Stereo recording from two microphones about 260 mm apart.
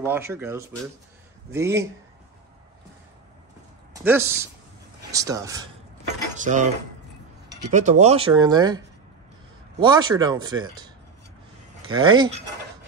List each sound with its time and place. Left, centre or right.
0.0 s speech: centre
4.0 s speech: centre
6.3 s cutlery: right
7.4 s a sound: right
7.7 s speech: right
11.9 s speech: centre